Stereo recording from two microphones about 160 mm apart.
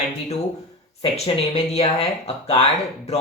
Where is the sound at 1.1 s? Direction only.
40° left (ahead or behind).